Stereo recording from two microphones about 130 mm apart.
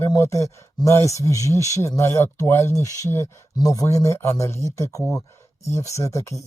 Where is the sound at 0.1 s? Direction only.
25° left (ahead or behind).